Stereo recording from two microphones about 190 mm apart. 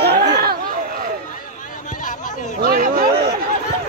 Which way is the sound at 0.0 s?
60° right (ahead or behind).